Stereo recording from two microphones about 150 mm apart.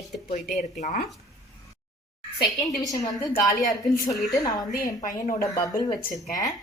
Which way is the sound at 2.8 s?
25° left (ahead or behind).